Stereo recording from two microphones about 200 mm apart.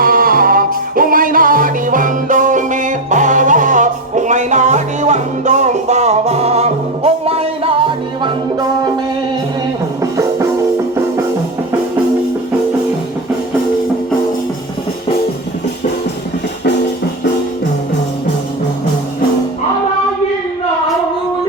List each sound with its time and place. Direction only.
0.0 s music: 45° right (ahead or behind); by 8.3 s 25° right (ahead or behind)
10.0 s music: 15° right (ahead or behind)